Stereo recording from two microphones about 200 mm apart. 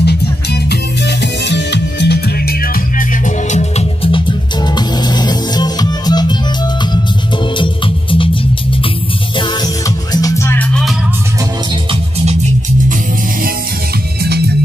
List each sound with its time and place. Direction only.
0.0 s music: 55° left (ahead or behind); by 6.3 s 20° left (ahead or behind)
7.5 s music: 25° left (ahead or behind)
9.4 s music: 20° left (ahead or behind); by 11.0 s 5° left (ahead or behind)
11.9 s music: 30° right (ahead or behind)